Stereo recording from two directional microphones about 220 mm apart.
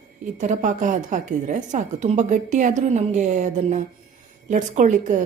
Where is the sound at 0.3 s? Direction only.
35° right (ahead or behind).